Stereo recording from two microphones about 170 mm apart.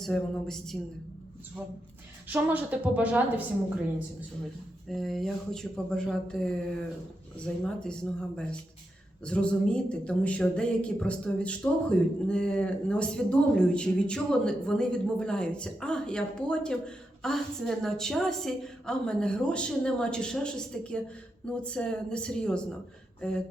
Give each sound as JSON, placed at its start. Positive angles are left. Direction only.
{"t": 0.0, "sound": "speech", "side_deg": 5}
{"t": 2.2, "sound": "a woman's voice", "side_deg": -10}
{"t": 4.9, "sound": "speech", "side_deg": 0}
{"t": 23.2, "sound": "a sound", "side_deg": 5}